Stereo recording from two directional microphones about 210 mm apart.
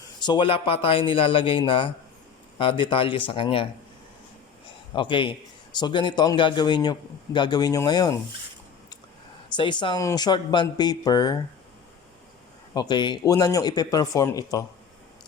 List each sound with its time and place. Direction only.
0.2 s a man's voice: 20° left (ahead or behind)
4.9 s a man's voice: 25° left (ahead or behind)
9.6 s a man's voice: 20° left (ahead or behind)
12.7 s speech: 20° left (ahead or behind)